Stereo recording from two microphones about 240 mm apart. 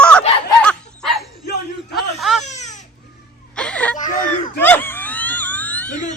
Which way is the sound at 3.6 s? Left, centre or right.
Centre.